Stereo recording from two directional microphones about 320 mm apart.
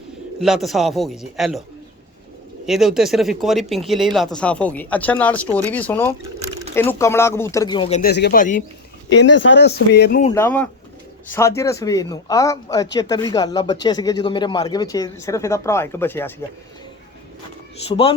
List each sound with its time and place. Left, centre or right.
0.3 s speech: centre
2.6 s speech: centre; by 10.2 s left
10.2 s speech: centre
17.8 s speech: centre